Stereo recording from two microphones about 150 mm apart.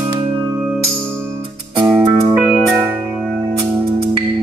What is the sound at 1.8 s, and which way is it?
Music, 35° right (ahead or behind).